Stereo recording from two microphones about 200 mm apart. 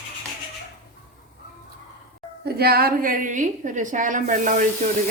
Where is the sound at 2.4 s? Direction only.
50° right (ahead or behind).